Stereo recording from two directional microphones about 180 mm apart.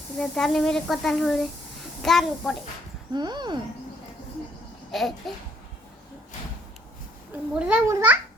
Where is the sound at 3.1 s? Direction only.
25° right (ahead or behind).